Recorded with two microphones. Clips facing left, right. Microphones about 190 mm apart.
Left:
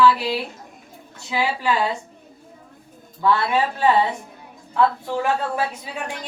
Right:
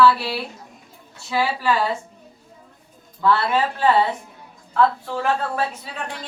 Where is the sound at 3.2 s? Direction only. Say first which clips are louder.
Even; 15° left (ahead or behind).